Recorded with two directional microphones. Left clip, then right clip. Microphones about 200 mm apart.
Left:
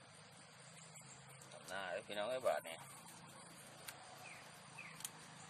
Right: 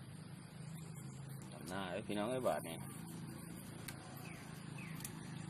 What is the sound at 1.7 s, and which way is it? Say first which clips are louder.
Speech: right 1 dB; 15° right (ahead or behind).